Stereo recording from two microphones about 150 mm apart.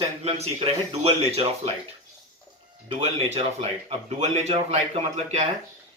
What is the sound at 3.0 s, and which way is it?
Speech, 45° right (ahead or behind).